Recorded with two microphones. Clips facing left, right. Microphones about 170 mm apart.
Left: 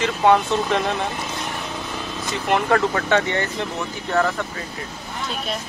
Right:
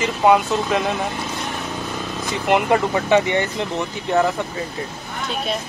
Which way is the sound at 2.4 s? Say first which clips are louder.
Right 2 dB; 15° right (ahead or behind).